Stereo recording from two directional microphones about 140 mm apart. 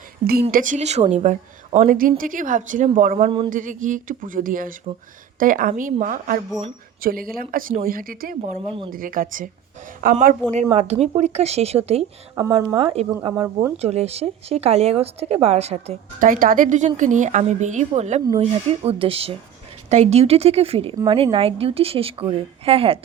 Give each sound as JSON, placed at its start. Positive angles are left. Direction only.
{"t": 0.2, "sound": "speech", "side_deg": -35}
{"t": 0.5, "sound": "a woman's voice", "side_deg": -65}
{"t": 1.9, "sound": "a woman's voice", "side_deg": -85}
{"t": 3.2, "sound": "speech", "side_deg": -35}
{"t": 3.5, "sound": "a woman's voice", "side_deg": -70}
{"t": 7.0, "sound": "speech", "side_deg": -90}
{"t": 8.5, "sound": "speech", "side_deg": -40}
{"t": 8.9, "sound": "a woman's voice", "side_deg": -85}
{"t": 10.8, "sound": "speech", "side_deg": -50}
{"t": 12.4, "sound": "speech", "side_deg": -25}
{"t": 12.7, "sound": "speech", "side_deg": -40}
{"t": 13.2, "sound": "speech", "side_deg": -25}
{"t": 13.8, "sound": "speech", "side_deg": -50}
{"t": 16.2, "sound": "a woman's voice", "side_deg": -85}